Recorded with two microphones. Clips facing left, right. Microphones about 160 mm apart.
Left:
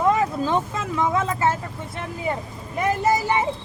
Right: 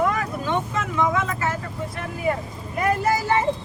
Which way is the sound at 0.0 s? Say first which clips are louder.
Left 3 dB; 25° left (ahead or behind).